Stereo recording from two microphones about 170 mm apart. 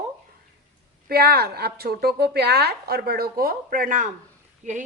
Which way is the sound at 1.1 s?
65° right (ahead or behind).